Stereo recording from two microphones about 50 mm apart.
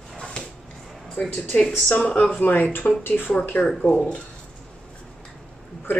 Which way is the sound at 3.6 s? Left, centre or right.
Centre.